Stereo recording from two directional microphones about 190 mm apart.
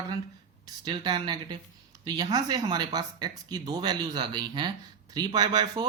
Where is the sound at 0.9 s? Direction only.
20° right (ahead or behind).